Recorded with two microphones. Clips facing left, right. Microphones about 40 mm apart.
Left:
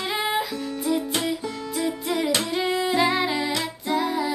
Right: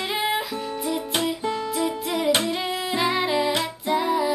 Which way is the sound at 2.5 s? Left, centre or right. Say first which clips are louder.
Left 3 dB; centre.